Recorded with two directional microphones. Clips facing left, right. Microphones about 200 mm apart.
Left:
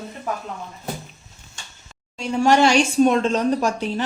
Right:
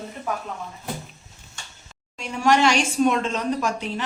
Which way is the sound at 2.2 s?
30° left (ahead or behind).